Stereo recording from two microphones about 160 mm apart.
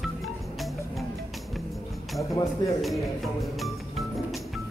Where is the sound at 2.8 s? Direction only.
Centre (ahead or behind).